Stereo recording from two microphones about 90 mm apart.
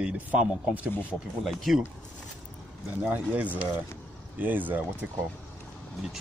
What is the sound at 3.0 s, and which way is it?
Speech, 15° right (ahead or behind).